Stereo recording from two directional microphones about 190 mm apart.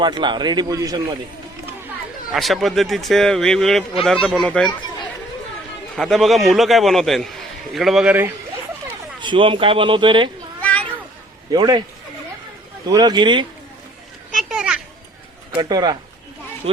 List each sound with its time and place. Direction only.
0.0 s speech: 25° right (ahead or behind)
2.3 s a man's voice: centre (ahead or behind)
6.0 s a man's voice: centre (ahead or behind)
9.2 s speech: 25° right (ahead or behind)
10.6 s cat: 5° left (ahead or behind)
11.5 s speech: 20° right (ahead or behind)
12.8 s speech: 20° right (ahead or behind)
14.3 s children playing: 5° right (ahead or behind)
15.5 s speech: 20° right (ahead or behind)